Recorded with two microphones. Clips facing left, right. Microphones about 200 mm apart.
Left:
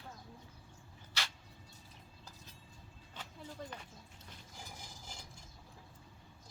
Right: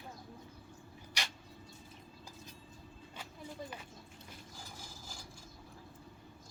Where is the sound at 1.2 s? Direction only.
15° right (ahead or behind).